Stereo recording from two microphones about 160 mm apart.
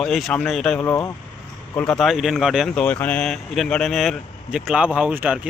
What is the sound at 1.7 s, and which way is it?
Speech, 5° left (ahead or behind).